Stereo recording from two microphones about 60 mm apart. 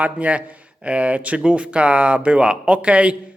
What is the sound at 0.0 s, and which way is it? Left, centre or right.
Speech, right.